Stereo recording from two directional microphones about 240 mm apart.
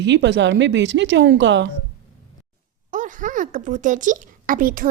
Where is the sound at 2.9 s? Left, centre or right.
Right.